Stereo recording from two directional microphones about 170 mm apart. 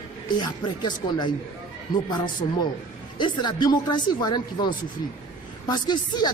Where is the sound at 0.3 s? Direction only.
25° left (ahead or behind).